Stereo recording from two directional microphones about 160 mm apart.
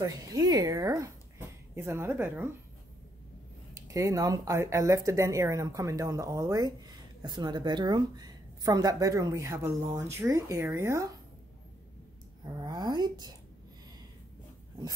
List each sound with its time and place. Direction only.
0.0 s a woman's voice: 25° right (ahead or behind)
3.8 s a woman's voice: 20° right (ahead or behind)
12.5 s a woman's voice: 25° right (ahead or behind)